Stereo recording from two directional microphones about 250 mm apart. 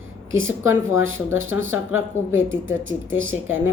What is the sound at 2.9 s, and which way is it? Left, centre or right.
Speech, right.